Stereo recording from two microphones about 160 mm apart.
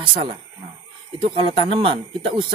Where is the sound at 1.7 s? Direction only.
35° right (ahead or behind).